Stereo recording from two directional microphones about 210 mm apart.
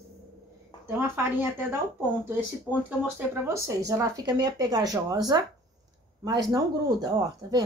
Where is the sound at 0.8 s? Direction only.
10° right (ahead or behind).